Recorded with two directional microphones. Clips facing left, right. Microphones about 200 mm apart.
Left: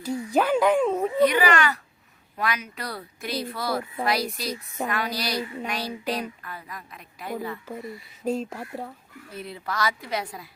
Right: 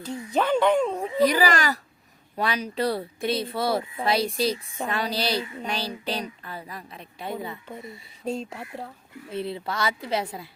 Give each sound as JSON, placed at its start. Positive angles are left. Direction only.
{"t": 0.0, "sound": "speech", "side_deg": 10}
{"t": 1.2, "sound": "a child's voice", "side_deg": -35}
{"t": 8.2, "sound": "speech", "side_deg": 5}
{"t": 9.3, "sound": "speech", "side_deg": -30}